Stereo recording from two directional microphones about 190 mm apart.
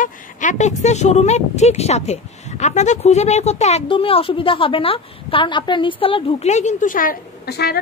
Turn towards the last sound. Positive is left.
turn(degrees=55)  # may be behind; listen again after turning